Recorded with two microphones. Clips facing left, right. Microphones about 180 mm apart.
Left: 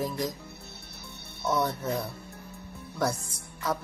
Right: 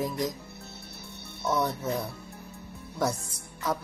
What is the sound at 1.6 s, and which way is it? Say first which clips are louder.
Speech: even; 15° right (ahead or behind).